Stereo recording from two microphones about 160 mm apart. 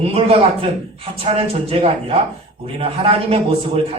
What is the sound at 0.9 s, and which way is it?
A man's voice, 40° right (ahead or behind).